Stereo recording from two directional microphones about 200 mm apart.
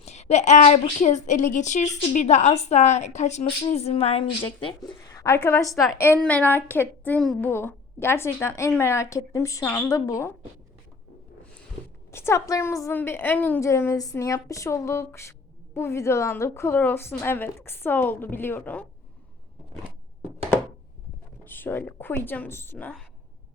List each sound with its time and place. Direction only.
0.0 s a woman's voice: 35° left (ahead or behind); by 10.3 s 15° left (ahead or behind)
12.1 s a woman's voice: 15° left (ahead or behind)
21.4 s a woman's voice: 10° left (ahead or behind)